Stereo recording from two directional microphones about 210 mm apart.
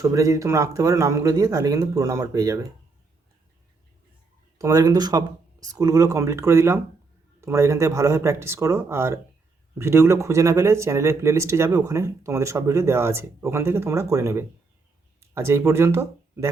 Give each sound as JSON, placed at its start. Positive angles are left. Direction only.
{"t": 0.0, "sound": "speech", "side_deg": -15}
{"t": 4.5, "sound": "speech", "side_deg": -15}